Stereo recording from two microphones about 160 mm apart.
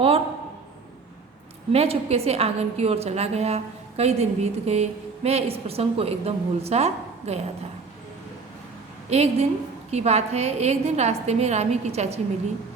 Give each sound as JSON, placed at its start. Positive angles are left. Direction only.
{"t": 1.7, "sound": "a woman's voice", "side_deg": -40}
{"t": 9.0, "sound": "a woman's voice", "side_deg": -40}